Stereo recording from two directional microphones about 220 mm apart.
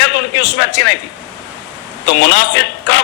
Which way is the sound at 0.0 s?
50° left (ahead or behind).